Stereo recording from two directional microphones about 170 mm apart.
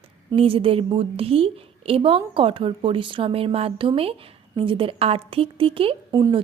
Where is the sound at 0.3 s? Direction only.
35° right (ahead or behind).